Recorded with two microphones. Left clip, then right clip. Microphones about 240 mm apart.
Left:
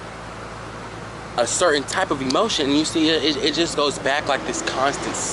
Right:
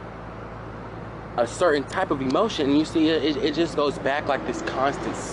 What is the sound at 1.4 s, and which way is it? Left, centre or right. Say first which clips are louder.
Speech: left 2 dB; centre.